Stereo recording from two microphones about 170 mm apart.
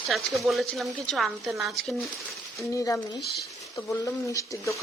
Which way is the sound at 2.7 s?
20° left (ahead or behind).